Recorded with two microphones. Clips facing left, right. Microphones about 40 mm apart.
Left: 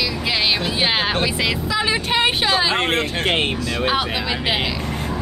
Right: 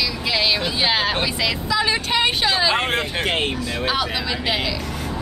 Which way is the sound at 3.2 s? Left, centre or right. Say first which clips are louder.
Left 2 dB; left.